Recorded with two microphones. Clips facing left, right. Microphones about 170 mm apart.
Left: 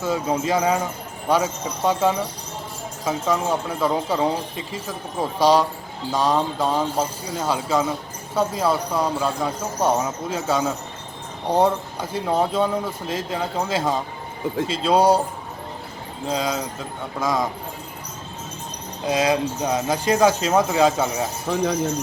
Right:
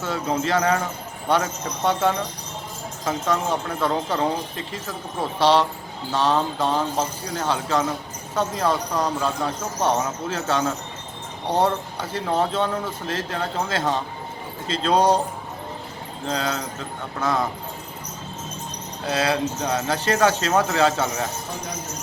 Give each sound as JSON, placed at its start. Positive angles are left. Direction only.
{"t": 0.0, "sound": "speech", "side_deg": 10}
{"t": 16.2, "sound": "speech", "side_deg": 10}
{"t": 19.0, "sound": "speech", "side_deg": 15}
{"t": 21.5, "sound": "speech", "side_deg": 90}